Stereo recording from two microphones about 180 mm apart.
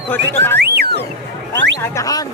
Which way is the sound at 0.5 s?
65° right (ahead or behind).